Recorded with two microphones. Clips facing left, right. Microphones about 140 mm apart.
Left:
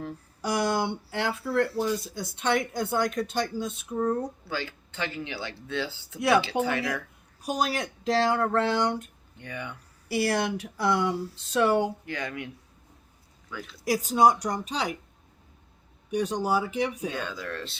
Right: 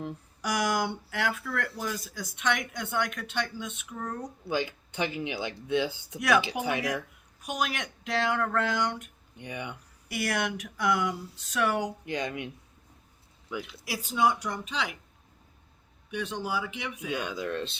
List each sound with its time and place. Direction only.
0.4 s speech: 30° left (ahead or behind)
4.4 s speech: 15° right (ahead or behind)
6.1 s speech: 30° left (ahead or behind)
6.4 s speech: 15° right (ahead or behind)
7.4 s speech: 35° left (ahead or behind)
9.4 s speech: 20° right (ahead or behind)
10.1 s speech: 30° left (ahead or behind)
12.0 s speech: 20° right (ahead or behind)
13.5 s speech: 15° right (ahead or behind)
13.8 s speech: 45° left (ahead or behind)
16.0 s speech: 40° left (ahead or behind)
17.1 s speech: 15° right (ahead or behind)